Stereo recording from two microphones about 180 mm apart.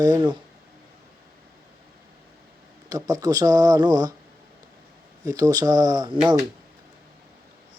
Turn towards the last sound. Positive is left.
turn(degrees=-15)  # may be behind; listen again after turning